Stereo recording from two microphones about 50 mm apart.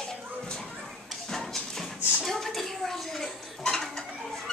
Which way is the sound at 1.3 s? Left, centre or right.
Centre.